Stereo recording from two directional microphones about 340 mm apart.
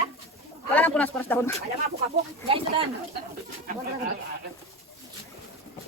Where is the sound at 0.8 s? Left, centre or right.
Centre.